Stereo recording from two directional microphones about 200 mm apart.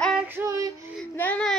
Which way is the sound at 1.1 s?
10° left (ahead or behind).